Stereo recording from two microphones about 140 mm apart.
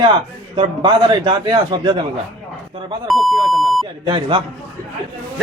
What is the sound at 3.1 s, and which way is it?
Speech, centre (ahead or behind).